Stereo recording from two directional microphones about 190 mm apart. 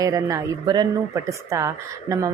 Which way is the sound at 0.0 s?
15° right (ahead or behind).